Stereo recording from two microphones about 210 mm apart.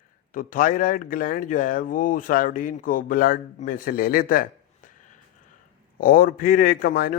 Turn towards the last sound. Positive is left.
turn(degrees=45)  # may be behind; listen again after turning